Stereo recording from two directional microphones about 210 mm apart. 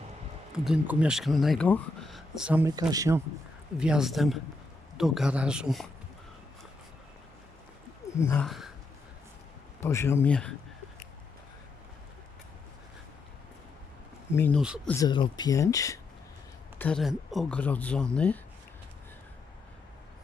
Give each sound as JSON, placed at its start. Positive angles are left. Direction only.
{"t": 0.5, "sound": "speech", "side_deg": -5}
{"t": 3.8, "sound": "speech", "side_deg": -5}
{"t": 8.2, "sound": "speech", "side_deg": 10}
{"t": 8.4, "sound": "speech", "side_deg": 0}
{"t": 9.8, "sound": "speech", "side_deg": 10}
{"t": 14.3, "sound": "speech", "side_deg": 10}